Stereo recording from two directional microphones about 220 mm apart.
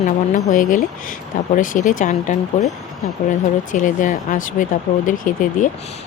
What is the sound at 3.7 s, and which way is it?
Speech, 35° left (ahead or behind).